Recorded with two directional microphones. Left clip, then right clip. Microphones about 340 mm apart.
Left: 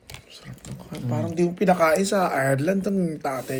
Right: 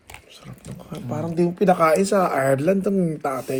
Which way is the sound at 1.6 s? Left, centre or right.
Centre.